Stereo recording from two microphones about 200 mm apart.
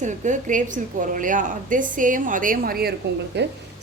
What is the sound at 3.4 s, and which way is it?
Speech, 60° right (ahead or behind).